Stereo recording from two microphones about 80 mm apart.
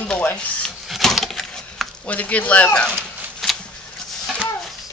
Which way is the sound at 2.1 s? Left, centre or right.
Centre.